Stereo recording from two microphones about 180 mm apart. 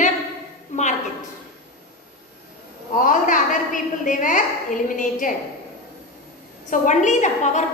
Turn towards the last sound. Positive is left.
turn(degrees=40)  # may be behind; listen again after turning